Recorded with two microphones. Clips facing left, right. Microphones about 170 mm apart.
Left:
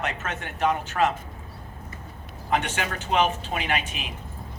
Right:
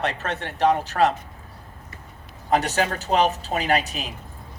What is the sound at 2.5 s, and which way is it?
A man's voice, 35° right (ahead or behind).